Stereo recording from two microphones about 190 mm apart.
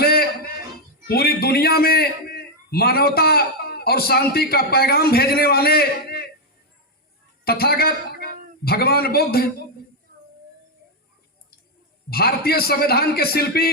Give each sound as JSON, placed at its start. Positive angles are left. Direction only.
{"t": 0.0, "sound": "a sound", "side_deg": 55}
{"t": 1.0, "sound": "a man's voice", "side_deg": 55}
{"t": 7.4, "sound": "a woman's voice", "side_deg": 55}
{"t": 12.1, "sound": "a man's voice", "side_deg": 55}